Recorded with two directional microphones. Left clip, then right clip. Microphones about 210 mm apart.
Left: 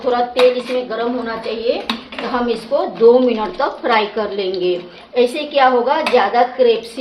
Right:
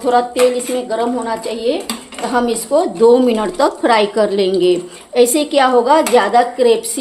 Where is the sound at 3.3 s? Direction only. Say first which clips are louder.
Right 3 dB; 65° right (ahead or behind).